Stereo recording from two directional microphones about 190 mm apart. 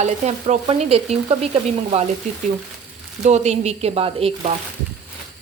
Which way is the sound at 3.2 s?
35° right (ahead or behind).